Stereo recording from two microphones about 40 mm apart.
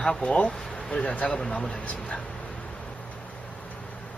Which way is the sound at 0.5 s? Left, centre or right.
Centre.